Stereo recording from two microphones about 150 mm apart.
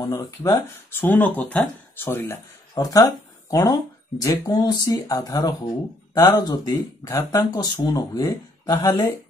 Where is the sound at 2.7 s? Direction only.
25° left (ahead or behind).